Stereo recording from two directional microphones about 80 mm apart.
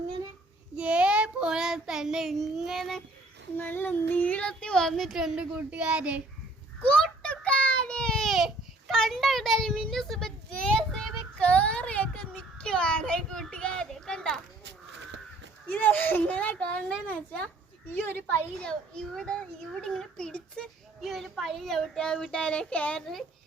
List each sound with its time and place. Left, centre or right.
0.8 s child singing: centre
3.6 s child singing: left; by 6.2 s centre
6.8 s a sound: centre
9.0 s child singing: centre
11.4 s a sound: centre
15.7 s a child's voice: centre
17.8 s a child's voice: left
18.7 s a child's voice: centre
23.0 s child singing: centre